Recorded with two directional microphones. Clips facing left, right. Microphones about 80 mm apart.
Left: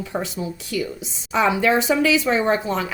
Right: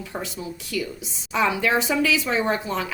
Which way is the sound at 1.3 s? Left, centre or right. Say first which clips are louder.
Left 3 dB; left.